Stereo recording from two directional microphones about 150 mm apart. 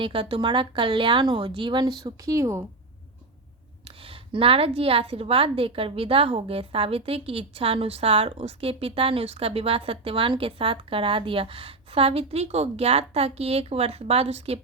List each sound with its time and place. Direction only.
0.0 s a woman's voice: 35° right (ahead or behind); by 2.6 s 20° right (ahead or behind)
3.8 s a woman's voice: 40° right (ahead or behind)